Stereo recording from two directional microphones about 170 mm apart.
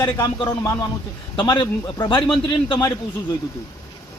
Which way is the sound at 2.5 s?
20° left (ahead or behind).